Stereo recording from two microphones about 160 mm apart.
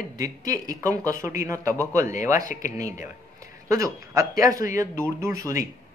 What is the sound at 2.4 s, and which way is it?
Speech, 55° left (ahead or behind).